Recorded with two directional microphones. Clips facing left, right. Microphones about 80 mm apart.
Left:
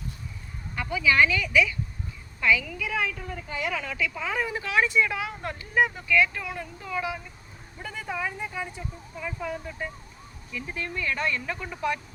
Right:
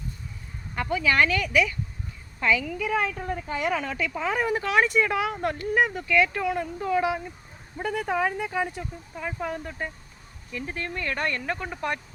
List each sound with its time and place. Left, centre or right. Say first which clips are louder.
0.8 s speech: even; right
2.4 s a woman's voice: even; right
6.1 s a woman's voice: right 2 dB; right
7.8 s speech: right 7 dB; right
9.1 s speech: right 2 dB; right